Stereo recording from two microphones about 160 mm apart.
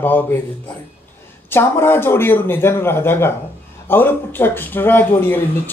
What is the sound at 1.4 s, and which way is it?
Speech, 15° left (ahead or behind).